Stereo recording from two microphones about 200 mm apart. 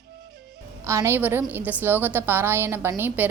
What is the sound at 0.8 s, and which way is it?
A woman's voice, 15° right (ahead or behind).